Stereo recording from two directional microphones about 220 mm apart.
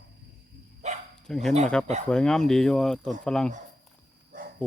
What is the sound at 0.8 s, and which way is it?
Bow-wow, 30° right (ahead or behind).